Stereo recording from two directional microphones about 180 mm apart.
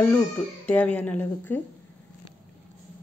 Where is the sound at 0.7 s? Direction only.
10° left (ahead or behind).